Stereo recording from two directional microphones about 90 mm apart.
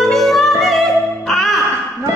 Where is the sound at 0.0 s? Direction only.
Centre (ahead or behind).